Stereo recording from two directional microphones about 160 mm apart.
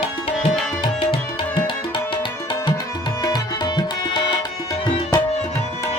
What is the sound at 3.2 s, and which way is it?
Tabla, 25° left (ahead or behind).